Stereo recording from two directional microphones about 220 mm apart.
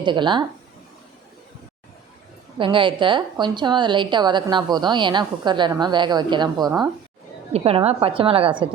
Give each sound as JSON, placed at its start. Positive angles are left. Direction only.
{"t": 0.0, "sound": "a woman's voice", "side_deg": -20}
{"t": 2.6, "sound": "a woman's voice", "side_deg": -20}
{"t": 7.5, "sound": "a woman's voice", "side_deg": -25}